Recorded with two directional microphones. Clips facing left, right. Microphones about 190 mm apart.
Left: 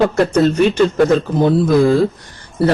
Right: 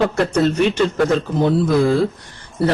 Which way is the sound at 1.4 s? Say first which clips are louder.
Left 3 dB; 45° left (ahead or behind).